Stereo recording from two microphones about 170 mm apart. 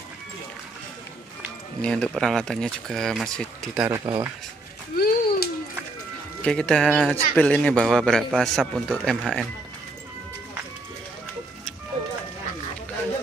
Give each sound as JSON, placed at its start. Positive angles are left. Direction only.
{"t": 1.8, "sound": "a man's voice", "side_deg": 5}
{"t": 3.7, "sound": "speech", "side_deg": -10}
{"t": 4.0, "sound": "speech", "side_deg": -25}
{"t": 4.9, "sound": "a sound", "side_deg": 60}
{"t": 6.4, "sound": "a man's voice", "side_deg": 5}